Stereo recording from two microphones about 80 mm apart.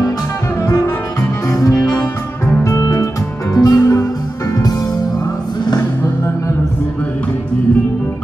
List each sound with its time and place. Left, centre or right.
0.7 s music: left
3.5 s music: left